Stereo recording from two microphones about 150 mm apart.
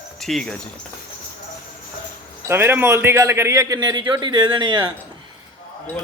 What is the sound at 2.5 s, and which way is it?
A man's voice, 15° right (ahead or behind).